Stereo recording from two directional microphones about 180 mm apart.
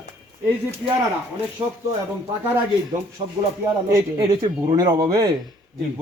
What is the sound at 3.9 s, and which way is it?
A man's voice, 15° right (ahead or behind).